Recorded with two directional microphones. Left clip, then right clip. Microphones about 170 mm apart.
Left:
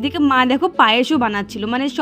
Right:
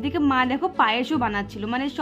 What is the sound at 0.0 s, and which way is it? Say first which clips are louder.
A woman's voice: left 6 dB; 35° left (ahead or behind).